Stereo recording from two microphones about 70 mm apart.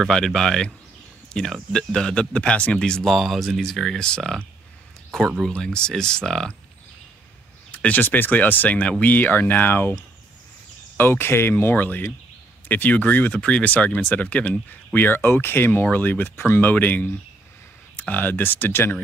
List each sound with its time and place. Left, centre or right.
0.0 s speech: centre
3.1 s speech: centre
5.5 s speech: centre
7.7 s speech: left
11.0 s speech: left
13.3 s speech: centre; by 18.9 s left